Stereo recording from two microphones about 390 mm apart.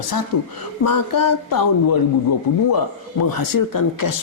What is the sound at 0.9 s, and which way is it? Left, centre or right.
Speech, left.